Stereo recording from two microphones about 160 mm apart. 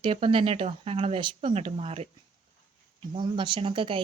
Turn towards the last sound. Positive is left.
turn(degrees=-35)  # may be behind; listen again after turning